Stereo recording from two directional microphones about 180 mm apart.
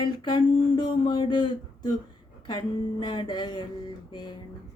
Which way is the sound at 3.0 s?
25° left (ahead or behind).